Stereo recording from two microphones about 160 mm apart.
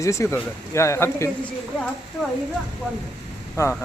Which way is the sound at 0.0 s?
20° left (ahead or behind).